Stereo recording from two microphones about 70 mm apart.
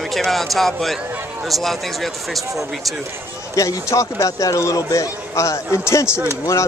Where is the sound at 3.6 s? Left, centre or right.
Left.